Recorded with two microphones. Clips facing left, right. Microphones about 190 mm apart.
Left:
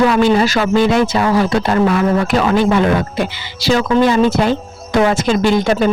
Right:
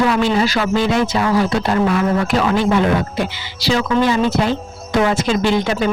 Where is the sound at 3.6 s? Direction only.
50° left (ahead or behind).